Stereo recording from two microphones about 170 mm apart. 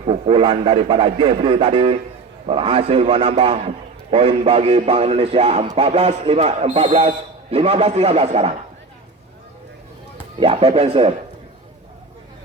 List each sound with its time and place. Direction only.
0.0 s speech: 35° right (ahead or behind)
10.4 s speech: 35° right (ahead or behind)